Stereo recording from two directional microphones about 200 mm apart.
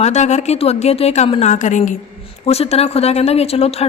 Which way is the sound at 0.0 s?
35° left (ahead or behind).